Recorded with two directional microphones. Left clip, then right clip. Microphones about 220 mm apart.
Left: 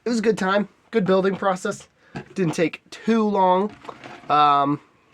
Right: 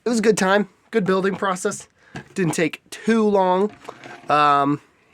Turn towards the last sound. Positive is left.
turn(degrees=-30)  # may be behind; listen again after turning